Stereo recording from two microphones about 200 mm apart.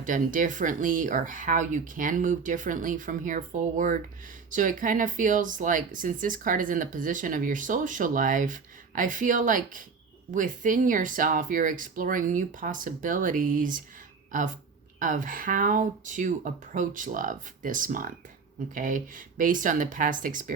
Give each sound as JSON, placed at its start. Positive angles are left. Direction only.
{"t": 0.0, "sound": "speech", "side_deg": -40}
{"t": 14.9, "sound": "speech", "side_deg": -40}